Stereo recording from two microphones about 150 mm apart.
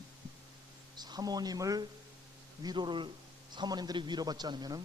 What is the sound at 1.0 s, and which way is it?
A man's voice, 25° right (ahead or behind).